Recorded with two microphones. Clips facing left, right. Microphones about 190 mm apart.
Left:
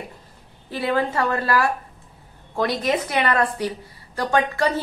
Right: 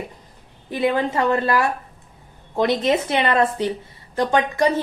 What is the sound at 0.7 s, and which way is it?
A woman's voice, 20° right (ahead or behind).